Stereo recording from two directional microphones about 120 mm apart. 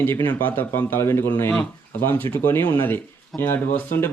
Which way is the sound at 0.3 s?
15° left (ahead or behind).